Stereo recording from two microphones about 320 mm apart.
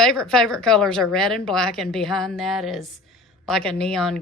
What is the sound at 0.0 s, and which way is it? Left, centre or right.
Speech, centre.